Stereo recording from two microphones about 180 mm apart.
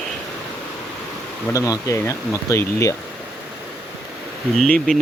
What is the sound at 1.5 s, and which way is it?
Speech, 20° left (ahead or behind).